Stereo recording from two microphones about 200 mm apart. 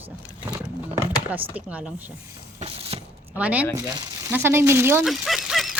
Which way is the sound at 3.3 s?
5° right (ahead or behind).